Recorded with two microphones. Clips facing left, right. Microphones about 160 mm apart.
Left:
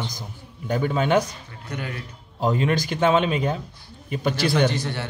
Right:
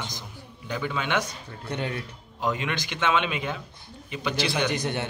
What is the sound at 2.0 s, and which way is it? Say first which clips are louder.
A man's voice: left 5 dB; 35° left (ahead or behind).